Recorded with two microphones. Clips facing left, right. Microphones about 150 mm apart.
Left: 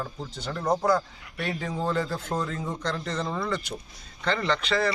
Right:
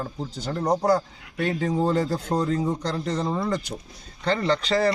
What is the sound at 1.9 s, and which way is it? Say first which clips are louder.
Speech: right 5 dB; 40° right (ahead or behind).